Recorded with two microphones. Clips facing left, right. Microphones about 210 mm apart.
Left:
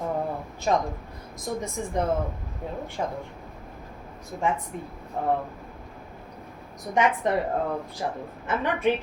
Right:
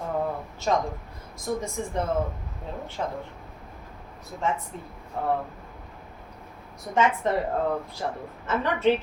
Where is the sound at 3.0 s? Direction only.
15° left (ahead or behind).